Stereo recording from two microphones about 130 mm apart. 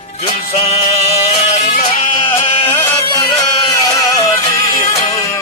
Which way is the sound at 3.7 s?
30° left (ahead or behind).